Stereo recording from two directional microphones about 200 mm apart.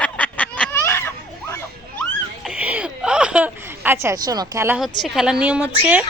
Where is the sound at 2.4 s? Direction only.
5° right (ahead or behind).